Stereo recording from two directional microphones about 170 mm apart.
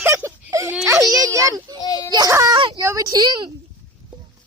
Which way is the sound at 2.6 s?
30° right (ahead or behind).